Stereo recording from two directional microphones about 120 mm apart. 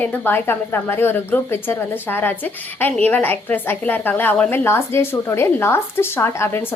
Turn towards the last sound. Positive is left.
turn(degrees=20)  # may be behind; listen again after turning